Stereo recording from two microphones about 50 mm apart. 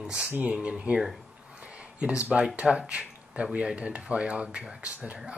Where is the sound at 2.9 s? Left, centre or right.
Centre.